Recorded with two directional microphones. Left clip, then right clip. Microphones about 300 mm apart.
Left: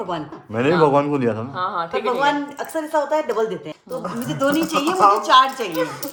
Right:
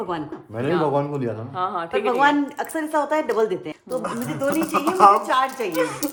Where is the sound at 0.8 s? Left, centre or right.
Left.